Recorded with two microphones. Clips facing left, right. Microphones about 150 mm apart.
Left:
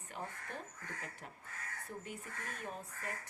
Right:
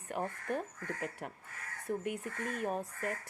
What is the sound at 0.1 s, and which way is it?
Speech, 55° right (ahead or behind).